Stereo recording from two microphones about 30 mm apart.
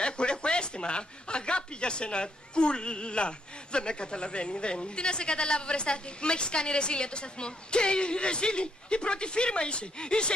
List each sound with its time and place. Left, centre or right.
0.0 s speech: left